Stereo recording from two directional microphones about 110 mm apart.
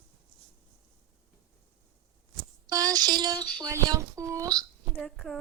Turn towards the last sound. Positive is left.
turn(degrees=5)  # may be behind; listen again after turning